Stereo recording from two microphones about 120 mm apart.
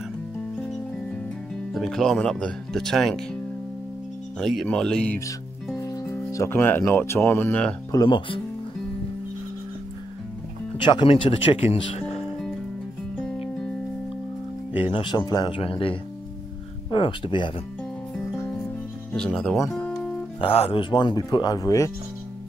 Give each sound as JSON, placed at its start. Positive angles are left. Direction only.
{"t": 1.7, "sound": "speech", "side_deg": 0}
{"t": 4.4, "sound": "speech", "side_deg": 5}
{"t": 5.8, "sound": "speech", "side_deg": 30}
{"t": 7.9, "sound": "speech", "side_deg": 40}
{"t": 10.8, "sound": "speech", "side_deg": 40}
{"t": 14.8, "sound": "speech", "side_deg": 50}
{"t": 15.6, "sound": "speech", "side_deg": 50}
{"t": 19.1, "sound": "speech", "side_deg": 5}
{"t": 19.7, "sound": "music", "side_deg": 5}
{"t": 20.3, "sound": "speech", "side_deg": 50}